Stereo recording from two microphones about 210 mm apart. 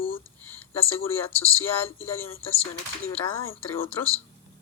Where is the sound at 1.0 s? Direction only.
10° left (ahead or behind).